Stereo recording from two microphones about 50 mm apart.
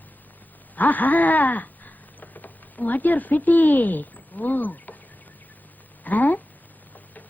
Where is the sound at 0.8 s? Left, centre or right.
Left.